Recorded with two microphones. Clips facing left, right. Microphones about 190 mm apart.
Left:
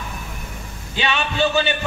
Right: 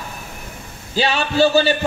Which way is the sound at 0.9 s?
35° right (ahead or behind).